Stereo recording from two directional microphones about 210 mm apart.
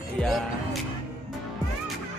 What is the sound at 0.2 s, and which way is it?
Speech, 5° left (ahead or behind).